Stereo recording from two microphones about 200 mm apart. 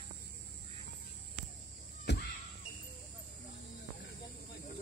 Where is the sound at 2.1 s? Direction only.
60° left (ahead or behind).